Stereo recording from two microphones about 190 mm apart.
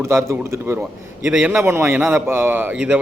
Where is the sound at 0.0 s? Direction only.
15° right (ahead or behind).